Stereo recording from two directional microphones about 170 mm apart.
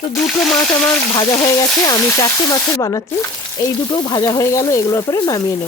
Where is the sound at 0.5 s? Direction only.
20° left (ahead or behind).